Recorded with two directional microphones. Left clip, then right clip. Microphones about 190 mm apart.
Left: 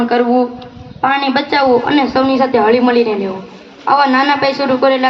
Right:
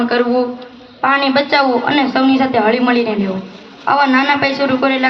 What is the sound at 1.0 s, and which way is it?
A woman's voice, 25° left (ahead or behind).